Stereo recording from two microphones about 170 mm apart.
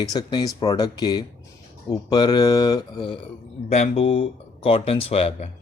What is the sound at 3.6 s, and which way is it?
Speech, 40° left (ahead or behind).